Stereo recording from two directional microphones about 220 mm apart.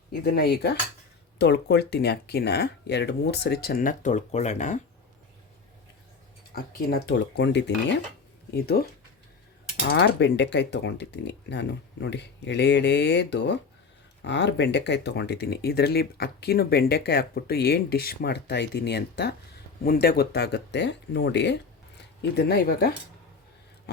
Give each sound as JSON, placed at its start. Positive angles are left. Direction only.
{"t": 0.1, "sound": "speech", "side_deg": 45}
{"t": 6.5, "sound": "speech", "side_deg": 45}
{"t": 9.9, "sound": "speech", "side_deg": 50}